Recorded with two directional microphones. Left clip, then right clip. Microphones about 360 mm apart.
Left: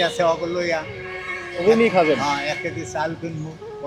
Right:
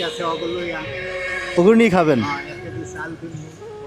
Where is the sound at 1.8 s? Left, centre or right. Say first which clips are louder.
Right 1 dB; right.